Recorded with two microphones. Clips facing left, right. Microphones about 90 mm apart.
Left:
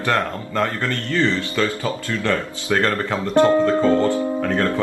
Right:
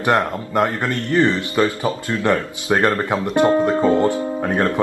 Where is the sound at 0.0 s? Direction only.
20° right (ahead or behind).